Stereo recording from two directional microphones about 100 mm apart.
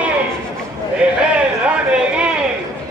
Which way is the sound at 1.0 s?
15° right (ahead or behind).